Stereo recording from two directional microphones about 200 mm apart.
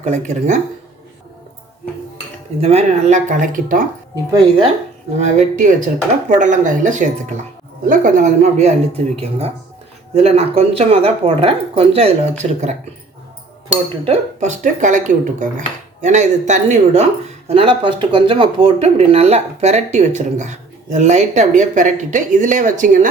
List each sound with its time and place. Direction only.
0.0 s speech: 35° right (ahead or behind)
2.6 s speech: 30° right (ahead or behind)
5.1 s speech: 40° right (ahead or behind)
14.0 s speech: 35° right (ahead or behind)